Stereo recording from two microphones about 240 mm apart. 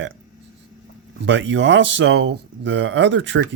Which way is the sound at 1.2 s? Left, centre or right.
Right.